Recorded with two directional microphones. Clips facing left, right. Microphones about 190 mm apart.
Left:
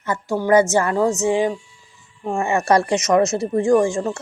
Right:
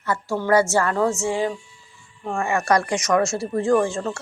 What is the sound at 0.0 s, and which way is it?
A woman's voice, 20° left (ahead or behind).